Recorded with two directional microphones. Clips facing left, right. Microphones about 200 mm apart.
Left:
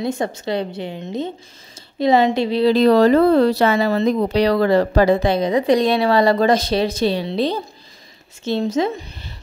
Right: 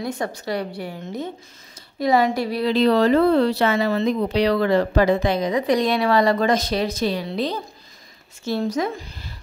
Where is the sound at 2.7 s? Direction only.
40° left (ahead or behind).